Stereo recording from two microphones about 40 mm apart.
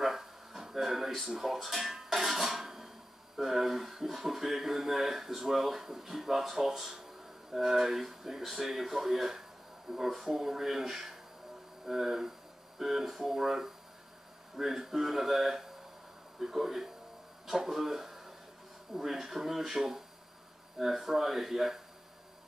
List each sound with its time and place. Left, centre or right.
0.0 s a sound: centre
1.3 s dishes: centre
3.3 s speech: centre